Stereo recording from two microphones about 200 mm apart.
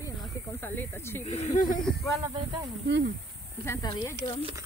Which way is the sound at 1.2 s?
35° left (ahead or behind).